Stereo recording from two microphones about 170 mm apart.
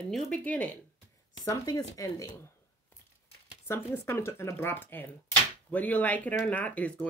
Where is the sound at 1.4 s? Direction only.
20° left (ahead or behind).